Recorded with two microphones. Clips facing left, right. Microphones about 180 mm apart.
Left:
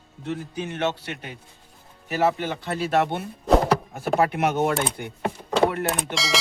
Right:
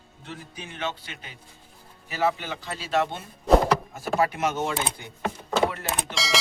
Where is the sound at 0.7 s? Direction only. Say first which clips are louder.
Left 5 dB; 70° left (ahead or behind).